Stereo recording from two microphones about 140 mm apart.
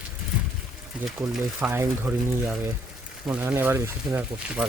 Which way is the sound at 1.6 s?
15° right (ahead or behind).